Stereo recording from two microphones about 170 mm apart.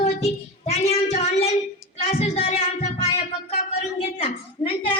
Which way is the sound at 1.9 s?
35° left (ahead or behind).